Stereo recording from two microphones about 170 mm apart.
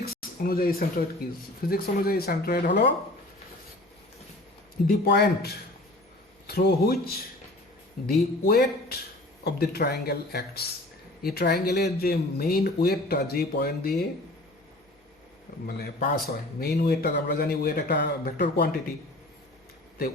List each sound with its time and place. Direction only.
0.0 s speech: 60° left (ahead or behind)
4.9 s speech: 70° left (ahead or behind)
15.6 s speech: 60° left (ahead or behind)